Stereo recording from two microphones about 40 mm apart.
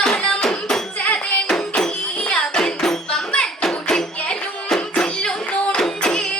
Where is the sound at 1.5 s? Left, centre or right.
Centre.